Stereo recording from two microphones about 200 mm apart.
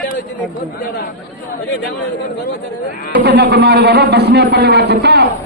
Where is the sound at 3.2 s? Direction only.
55° right (ahead or behind).